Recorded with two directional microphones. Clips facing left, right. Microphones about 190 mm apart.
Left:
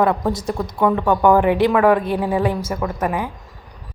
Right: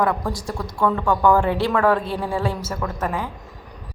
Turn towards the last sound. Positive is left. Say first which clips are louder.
# left 4 dB
turn(degrees=15)  # may be behind; listen again after turning